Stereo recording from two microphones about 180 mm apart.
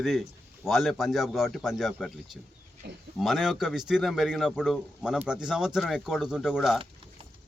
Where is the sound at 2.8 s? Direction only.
65° right (ahead or behind).